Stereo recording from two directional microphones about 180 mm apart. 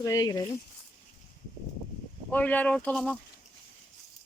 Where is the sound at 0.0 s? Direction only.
20° left (ahead or behind).